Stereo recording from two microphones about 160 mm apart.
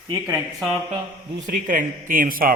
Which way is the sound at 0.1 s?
15° right (ahead or behind).